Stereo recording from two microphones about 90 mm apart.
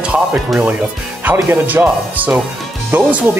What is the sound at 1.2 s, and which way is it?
Speech, 20° right (ahead or behind).